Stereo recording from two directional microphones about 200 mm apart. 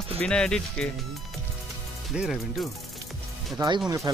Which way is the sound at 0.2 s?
5° left (ahead or behind).